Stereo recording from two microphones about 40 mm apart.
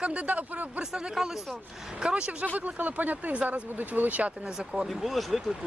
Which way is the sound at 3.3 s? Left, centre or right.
Right.